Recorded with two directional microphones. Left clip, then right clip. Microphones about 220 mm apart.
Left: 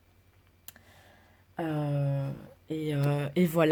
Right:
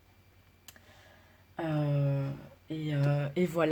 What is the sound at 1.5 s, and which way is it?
Speech, 45° left (ahead or behind).